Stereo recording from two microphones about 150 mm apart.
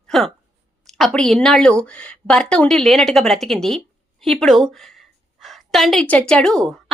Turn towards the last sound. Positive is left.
turn(degrees=5)  # may be behind; listen again after turning